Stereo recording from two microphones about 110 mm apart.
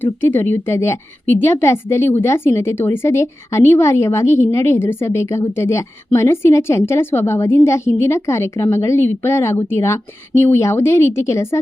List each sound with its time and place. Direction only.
0.0 s a woman's voice: 20° left (ahead or behind)